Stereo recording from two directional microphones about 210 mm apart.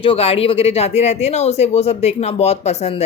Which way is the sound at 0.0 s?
25° left (ahead or behind).